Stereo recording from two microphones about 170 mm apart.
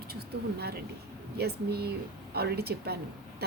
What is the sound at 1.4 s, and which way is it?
A woman's voice, 70° right (ahead or behind).